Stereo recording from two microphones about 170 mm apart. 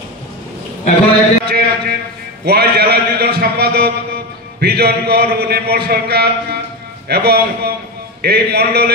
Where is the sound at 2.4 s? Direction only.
70° right (ahead or behind).